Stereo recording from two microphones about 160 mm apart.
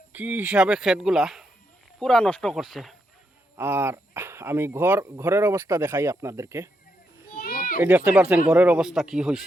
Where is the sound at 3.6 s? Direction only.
15° right (ahead or behind).